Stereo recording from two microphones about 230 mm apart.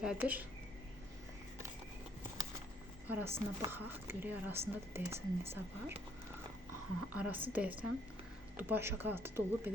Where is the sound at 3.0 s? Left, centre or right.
Centre.